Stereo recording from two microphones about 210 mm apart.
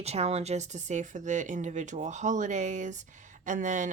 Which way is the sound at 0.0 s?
30° right (ahead or behind).